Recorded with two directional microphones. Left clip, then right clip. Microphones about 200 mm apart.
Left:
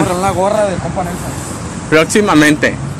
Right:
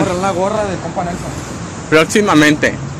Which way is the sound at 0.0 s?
45° left (ahead or behind).